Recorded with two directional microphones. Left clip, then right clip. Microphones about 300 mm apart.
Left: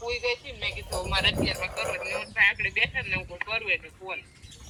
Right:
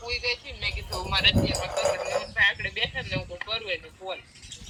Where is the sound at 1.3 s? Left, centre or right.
Centre.